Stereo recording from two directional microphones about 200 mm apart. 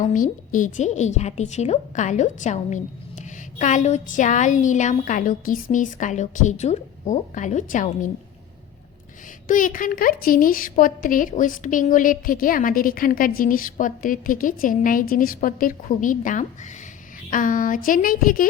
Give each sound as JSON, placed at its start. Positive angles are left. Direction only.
{"t": 0.0, "sound": "a woman's voice", "side_deg": 40}
{"t": 9.5, "sound": "a woman's voice", "side_deg": 40}